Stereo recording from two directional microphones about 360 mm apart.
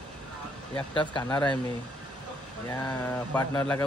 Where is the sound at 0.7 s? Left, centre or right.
Centre.